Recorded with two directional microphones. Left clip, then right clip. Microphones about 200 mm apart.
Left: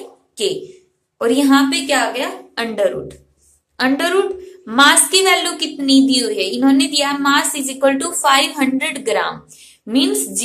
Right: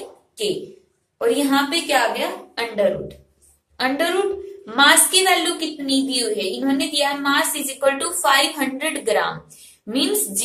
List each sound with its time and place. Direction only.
1.1 s a woman's voice: 35° left (ahead or behind)